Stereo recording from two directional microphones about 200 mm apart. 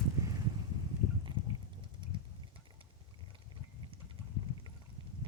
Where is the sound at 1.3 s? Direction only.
25° right (ahead or behind).